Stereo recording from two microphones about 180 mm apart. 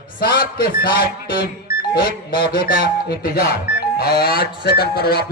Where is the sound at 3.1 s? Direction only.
55° left (ahead or behind).